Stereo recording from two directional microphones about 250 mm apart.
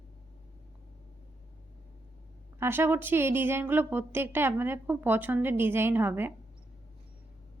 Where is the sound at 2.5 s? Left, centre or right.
Centre.